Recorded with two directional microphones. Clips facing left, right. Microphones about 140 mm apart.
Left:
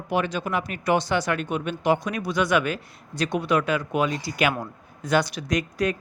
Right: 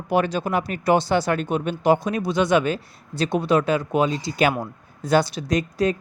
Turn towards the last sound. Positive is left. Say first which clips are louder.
# right 3 dB
turn(degrees=-30)  # may be behind; listen again after turning